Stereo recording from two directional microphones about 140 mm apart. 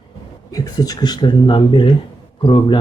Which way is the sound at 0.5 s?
25° left (ahead or behind).